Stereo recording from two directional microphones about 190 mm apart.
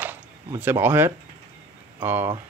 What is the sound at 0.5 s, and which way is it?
Speech, 10° right (ahead or behind).